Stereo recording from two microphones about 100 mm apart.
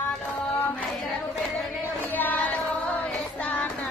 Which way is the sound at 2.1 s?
15° left (ahead or behind).